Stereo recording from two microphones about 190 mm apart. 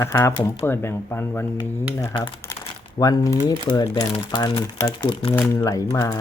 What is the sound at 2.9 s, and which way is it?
Speech, 20° left (ahead or behind).